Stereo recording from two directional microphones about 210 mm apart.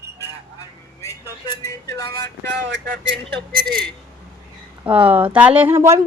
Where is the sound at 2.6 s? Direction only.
55° right (ahead or behind).